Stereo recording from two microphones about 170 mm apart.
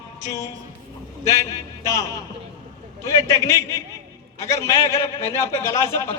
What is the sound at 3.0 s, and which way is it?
A man's voice, 20° left (ahead or behind).